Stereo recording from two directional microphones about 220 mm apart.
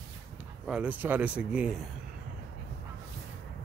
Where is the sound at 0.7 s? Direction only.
5° right (ahead or behind).